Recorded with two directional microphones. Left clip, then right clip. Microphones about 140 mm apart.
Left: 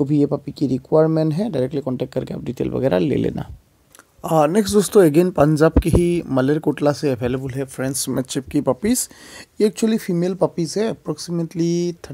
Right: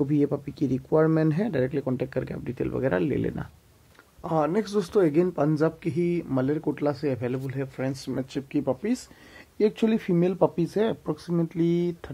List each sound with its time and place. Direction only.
0.0 s speech: 25° left (ahead or behind); by 9.1 s 45° left (ahead or behind)
9.8 s speech: 15° left (ahead or behind)